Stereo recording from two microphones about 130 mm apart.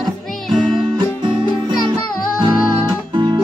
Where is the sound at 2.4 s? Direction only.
35° right (ahead or behind).